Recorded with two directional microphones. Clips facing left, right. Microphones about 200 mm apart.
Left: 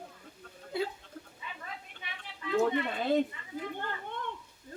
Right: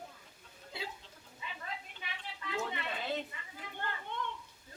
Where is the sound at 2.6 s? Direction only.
50° left (ahead or behind).